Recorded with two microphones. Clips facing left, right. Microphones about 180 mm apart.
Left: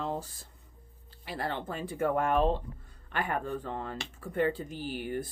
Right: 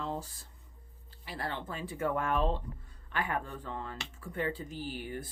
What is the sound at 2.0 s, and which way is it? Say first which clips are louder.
Speech: left 4 dB; 50° left (ahead or behind).